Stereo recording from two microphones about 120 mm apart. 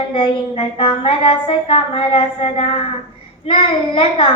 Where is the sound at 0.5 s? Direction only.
50° left (ahead or behind).